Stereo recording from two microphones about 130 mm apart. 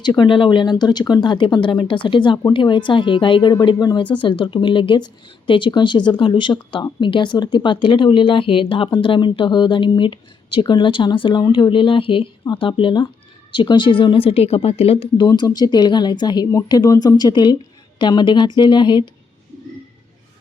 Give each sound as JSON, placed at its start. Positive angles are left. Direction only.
{"t": 0.0, "sound": "speech", "side_deg": 35}
{"t": 15.3, "sound": "speech", "side_deg": 30}